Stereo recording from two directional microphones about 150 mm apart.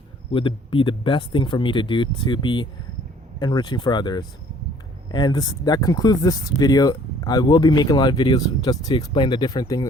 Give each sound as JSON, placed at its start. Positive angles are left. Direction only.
{"t": 0.3, "sound": "speech", "side_deg": 35}